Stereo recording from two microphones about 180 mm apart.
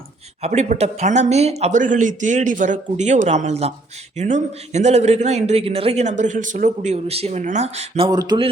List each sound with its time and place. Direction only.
0.4 s a man's voice: 40° right (ahead or behind); by 8.4 s 25° right (ahead or behind)